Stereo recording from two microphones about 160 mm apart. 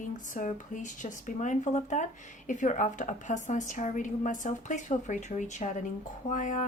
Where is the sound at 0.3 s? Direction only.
50° left (ahead or behind).